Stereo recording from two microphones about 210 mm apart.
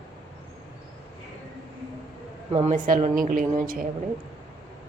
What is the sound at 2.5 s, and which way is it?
Speech, 25° right (ahead or behind).